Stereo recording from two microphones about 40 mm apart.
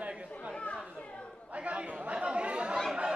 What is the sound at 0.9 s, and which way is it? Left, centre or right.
Chatter, left.